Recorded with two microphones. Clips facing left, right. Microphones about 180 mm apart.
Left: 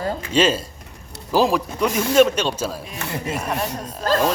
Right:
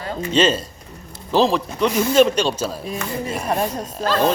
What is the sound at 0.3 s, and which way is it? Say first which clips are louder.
Speech: right 1 dB; 10° left (ahead or behind).